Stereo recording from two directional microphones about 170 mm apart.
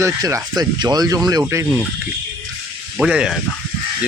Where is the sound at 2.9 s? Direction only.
5° right (ahead or behind).